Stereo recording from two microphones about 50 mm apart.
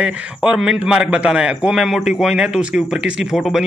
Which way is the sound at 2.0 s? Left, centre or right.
Centre.